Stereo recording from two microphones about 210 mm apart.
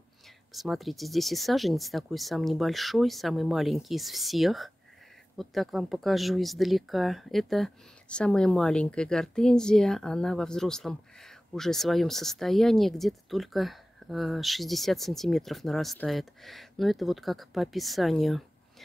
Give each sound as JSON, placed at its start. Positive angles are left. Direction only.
{"t": 0.5, "sound": "speech", "side_deg": 0}